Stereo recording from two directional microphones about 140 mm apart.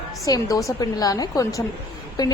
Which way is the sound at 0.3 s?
25° left (ahead or behind).